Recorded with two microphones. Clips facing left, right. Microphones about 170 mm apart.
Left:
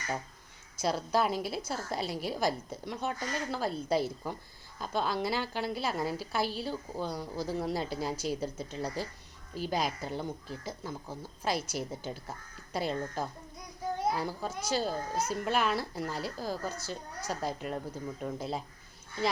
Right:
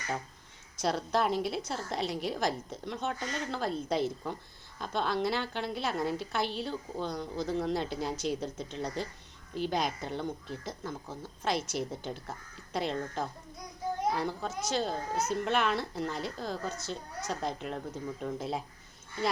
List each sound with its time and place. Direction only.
0.8 s a woman's voice: 5° left (ahead or behind)